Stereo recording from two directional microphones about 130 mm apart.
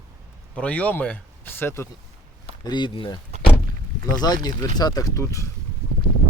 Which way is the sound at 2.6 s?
35° left (ahead or behind).